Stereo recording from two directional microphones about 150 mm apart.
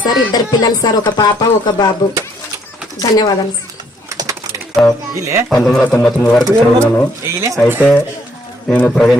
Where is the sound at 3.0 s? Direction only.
25° left (ahead or behind).